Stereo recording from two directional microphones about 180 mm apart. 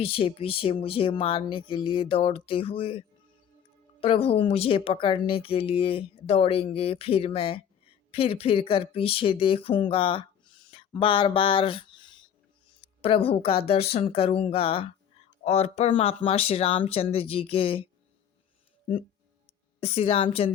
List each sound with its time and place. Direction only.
0.0 s speech: 30° left (ahead or behind)
4.0 s speech: 30° left (ahead or behind)
19.8 s speech: 35° left (ahead or behind)